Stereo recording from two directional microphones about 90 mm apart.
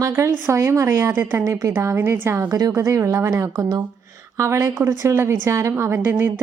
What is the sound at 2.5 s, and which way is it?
A woman's voice, 40° right (ahead or behind).